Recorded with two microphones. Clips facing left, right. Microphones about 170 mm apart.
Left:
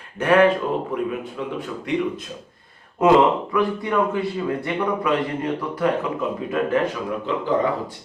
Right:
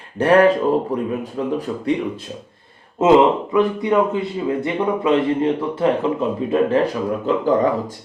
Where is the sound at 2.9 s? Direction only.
20° right (ahead or behind).